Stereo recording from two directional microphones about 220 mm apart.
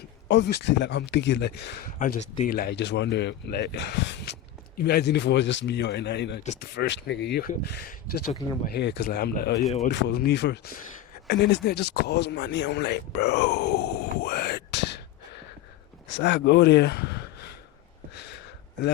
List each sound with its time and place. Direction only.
0.3 s speech: 50° left (ahead or behind)
2.0 s speech: 35° left (ahead or behind)
2.5 s speech: 45° left (ahead or behind)
6.4 s speech: 30° left (ahead or behind)
6.7 s speech: 55° left (ahead or behind)
9.6 s speech: centre (ahead or behind)
9.9 s speech: 50° left (ahead or behind)
16.0 s speech: 55° left (ahead or behind)